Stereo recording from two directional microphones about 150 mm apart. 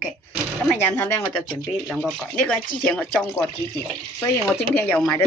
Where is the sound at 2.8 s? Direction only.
5° left (ahead or behind).